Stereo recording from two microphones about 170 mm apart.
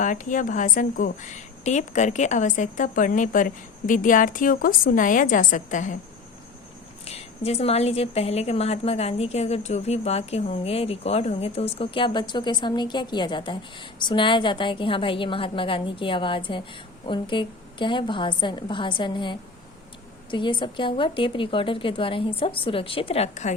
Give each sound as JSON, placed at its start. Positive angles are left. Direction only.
{"t": 0.0, "sound": "a woman's voice", "side_deg": 50}
{"t": 7.0, "sound": "a woman's voice", "side_deg": 35}